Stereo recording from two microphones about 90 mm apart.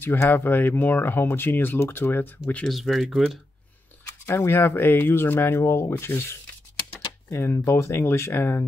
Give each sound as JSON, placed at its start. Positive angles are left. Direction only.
{"t": 0.0, "sound": "speech", "side_deg": 25}
{"t": 2.6, "sound": "speech", "side_deg": 0}
{"t": 4.3, "sound": "speech", "side_deg": 25}